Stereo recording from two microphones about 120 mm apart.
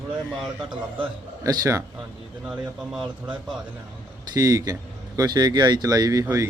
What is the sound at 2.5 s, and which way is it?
Speech, 5° right (ahead or behind).